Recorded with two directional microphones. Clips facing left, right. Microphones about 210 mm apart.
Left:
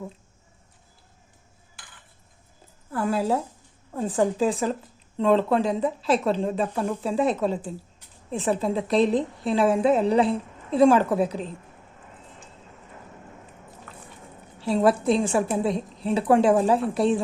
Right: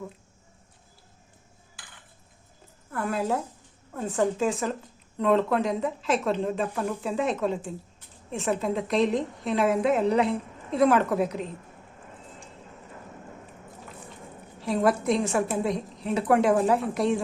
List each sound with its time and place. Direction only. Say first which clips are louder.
2.9 s a woman's voice: left 3 dB; 30° left (ahead or behind)
14.6 s a woman's voice: left 3 dB; 30° left (ahead or behind)